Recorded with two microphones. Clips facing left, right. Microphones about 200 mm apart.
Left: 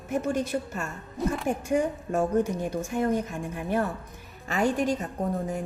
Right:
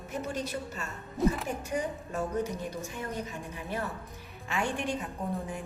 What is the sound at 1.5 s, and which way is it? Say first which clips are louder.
A woman's voice: left 7 dB; 45° left (ahead or behind).